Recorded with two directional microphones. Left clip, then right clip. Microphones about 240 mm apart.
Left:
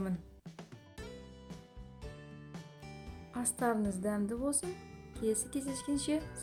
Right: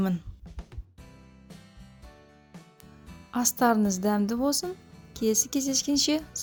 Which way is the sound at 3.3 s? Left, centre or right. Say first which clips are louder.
Right 10 dB; right.